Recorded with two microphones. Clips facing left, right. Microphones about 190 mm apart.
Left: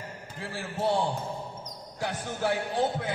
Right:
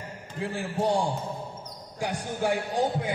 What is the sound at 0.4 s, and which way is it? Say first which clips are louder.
Speech: right 4 dB; 15° right (ahead or behind).